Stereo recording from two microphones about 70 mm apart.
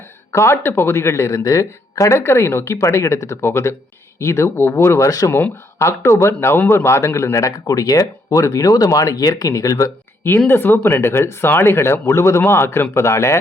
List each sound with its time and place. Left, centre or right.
0.3 s speech: left
5.0 s speech: left
5.3 s speech: left
10.5 s speech: left